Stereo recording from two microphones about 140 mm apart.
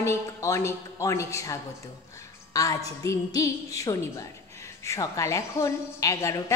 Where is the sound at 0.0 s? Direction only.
20° left (ahead or behind).